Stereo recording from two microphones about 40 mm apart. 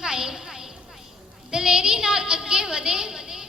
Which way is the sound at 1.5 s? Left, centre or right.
Centre.